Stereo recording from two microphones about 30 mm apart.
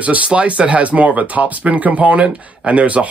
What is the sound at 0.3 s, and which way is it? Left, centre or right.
Speech, right.